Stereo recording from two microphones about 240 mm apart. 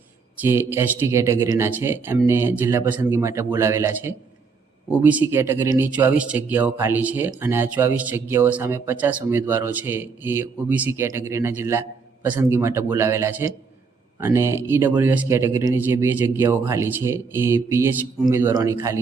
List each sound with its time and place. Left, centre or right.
0.4 s speech: centre